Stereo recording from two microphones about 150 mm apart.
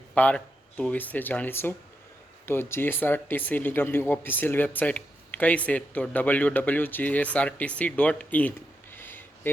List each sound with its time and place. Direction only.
0.1 s speech: 10° left (ahead or behind)